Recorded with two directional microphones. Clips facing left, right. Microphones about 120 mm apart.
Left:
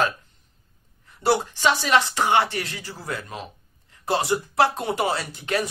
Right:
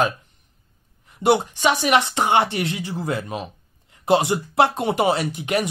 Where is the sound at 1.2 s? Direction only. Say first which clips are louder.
Right 3 dB; 20° right (ahead or behind).